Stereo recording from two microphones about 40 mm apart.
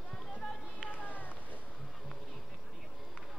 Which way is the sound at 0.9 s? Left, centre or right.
Left.